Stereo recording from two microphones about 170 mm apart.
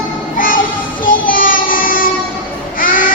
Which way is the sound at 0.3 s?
55° left (ahead or behind).